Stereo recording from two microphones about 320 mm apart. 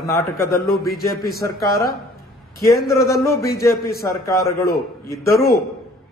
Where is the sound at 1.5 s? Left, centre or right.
Centre.